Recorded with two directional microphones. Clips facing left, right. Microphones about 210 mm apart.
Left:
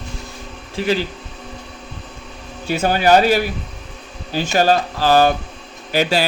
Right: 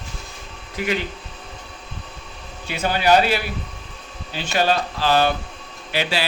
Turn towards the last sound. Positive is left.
turn(degrees=45)  # may be behind; listen again after turning